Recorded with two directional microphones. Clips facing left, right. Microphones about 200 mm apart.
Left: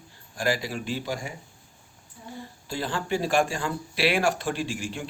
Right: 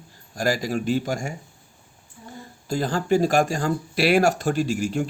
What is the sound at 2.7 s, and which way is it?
Speech, 45° right (ahead or behind).